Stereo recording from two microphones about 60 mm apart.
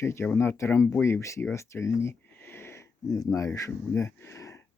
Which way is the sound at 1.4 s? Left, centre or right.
Left.